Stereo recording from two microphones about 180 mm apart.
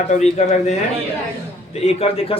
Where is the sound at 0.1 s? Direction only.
40° left (ahead or behind).